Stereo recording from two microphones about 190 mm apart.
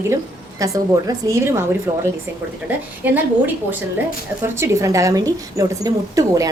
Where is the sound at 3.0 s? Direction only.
10° right (ahead or behind).